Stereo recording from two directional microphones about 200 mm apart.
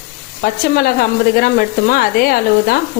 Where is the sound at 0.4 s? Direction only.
50° left (ahead or behind).